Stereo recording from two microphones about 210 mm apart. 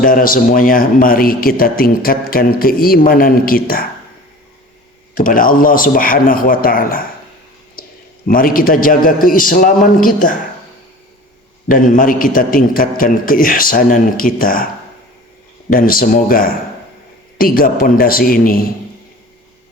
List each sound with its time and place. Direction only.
0.0 s a man's voice: 40° left (ahead or behind)
5.1 s a man's voice: 40° left (ahead or behind)
8.3 s a man's voice: 40° left (ahead or behind)
11.7 s a man's voice: 40° left (ahead or behind)
15.7 s a man's voice: 40° left (ahead or behind)